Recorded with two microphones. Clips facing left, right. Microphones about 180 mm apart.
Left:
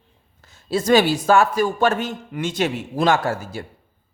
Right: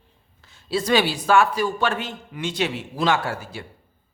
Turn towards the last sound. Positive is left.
turn(degrees=40)  # may be behind; listen again after turning